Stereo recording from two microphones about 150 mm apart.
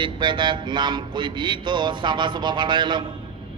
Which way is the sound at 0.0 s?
30° right (ahead or behind).